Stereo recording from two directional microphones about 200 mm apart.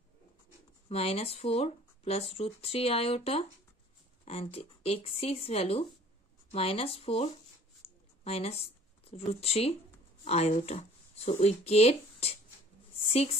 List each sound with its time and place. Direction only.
0.8 s speech: 30° left (ahead or behind)
7.8 s a sound: 30° left (ahead or behind)
8.2 s a woman's voice: 30° left (ahead or behind)